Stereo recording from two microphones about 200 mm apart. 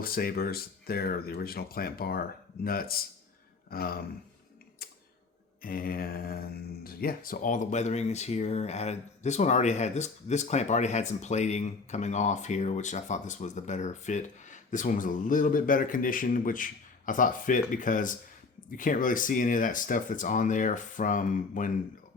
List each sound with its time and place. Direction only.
0.0 s speech: 45° left (ahead or behind)
4.8 s a sound: 50° left (ahead or behind)
5.6 s speech: 45° left (ahead or behind)